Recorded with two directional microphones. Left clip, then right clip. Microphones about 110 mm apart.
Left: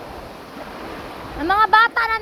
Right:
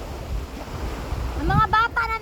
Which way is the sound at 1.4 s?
70° right (ahead or behind).